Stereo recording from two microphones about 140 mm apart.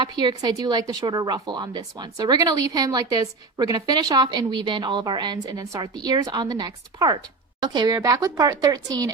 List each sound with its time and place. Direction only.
0.0 s a woman's voice: 30° right (ahead or behind)